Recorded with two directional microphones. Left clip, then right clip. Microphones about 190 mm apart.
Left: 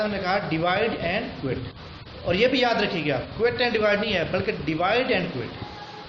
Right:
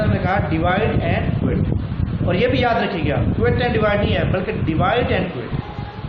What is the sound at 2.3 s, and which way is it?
A man's voice, 40° left (ahead or behind).